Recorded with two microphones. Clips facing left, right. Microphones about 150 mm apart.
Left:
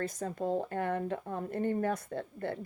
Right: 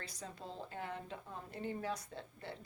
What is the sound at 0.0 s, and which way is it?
Speech, 50° left (ahead or behind).